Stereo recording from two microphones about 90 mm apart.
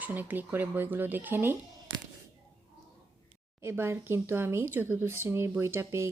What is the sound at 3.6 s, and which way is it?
Speech, 30° right (ahead or behind).